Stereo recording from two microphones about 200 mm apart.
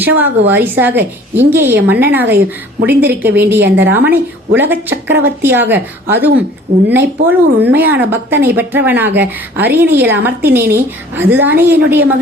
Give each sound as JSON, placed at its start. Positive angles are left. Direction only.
{"t": 0.0, "sound": "speech", "side_deg": -10}
{"t": 3.6, "sound": "a woman's voice", "side_deg": -60}
{"t": 3.9, "sound": "speech", "side_deg": -10}